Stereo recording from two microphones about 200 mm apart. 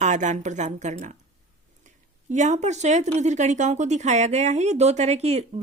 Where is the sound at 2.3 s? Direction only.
35° right (ahead or behind).